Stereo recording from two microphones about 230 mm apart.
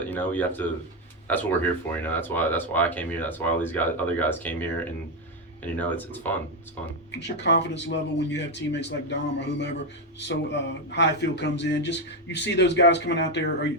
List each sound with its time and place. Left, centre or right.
0.0 s speech: centre
7.2 s a man's voice: left